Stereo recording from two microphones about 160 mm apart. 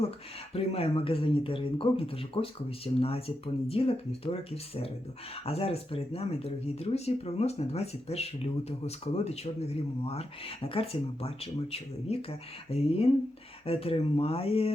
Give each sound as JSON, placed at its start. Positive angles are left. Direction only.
{"t": 0.5, "sound": "speech", "side_deg": 40}